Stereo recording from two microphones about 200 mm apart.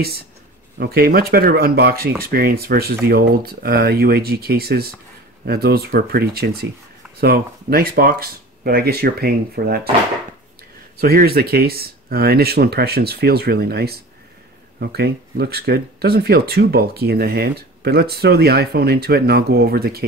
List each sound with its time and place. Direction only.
0.7 s speech: 50° right (ahead or behind)
11.0 s speech: 50° right (ahead or behind)